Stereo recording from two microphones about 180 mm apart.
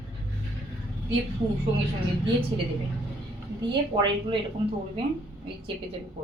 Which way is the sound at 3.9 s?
25° right (ahead or behind).